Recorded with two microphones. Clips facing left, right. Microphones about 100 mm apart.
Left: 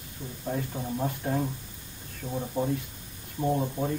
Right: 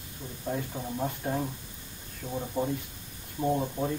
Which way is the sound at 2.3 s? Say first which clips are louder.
Left 1 dB; centre (ahead or behind).